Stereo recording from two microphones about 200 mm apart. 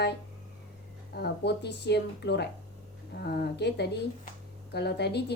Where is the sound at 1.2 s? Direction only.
55° left (ahead or behind).